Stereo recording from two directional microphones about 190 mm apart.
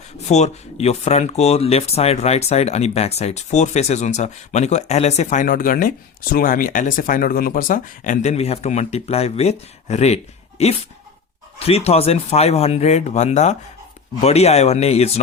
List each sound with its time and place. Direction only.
0.3 s speech: 35° left (ahead or behind)